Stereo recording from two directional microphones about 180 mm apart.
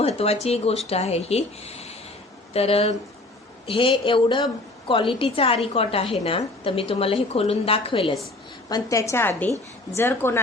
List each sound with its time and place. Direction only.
0.0 s a woman's voice: 35° left (ahead or behind)
8.7 s a woman's voice: 15° left (ahead or behind)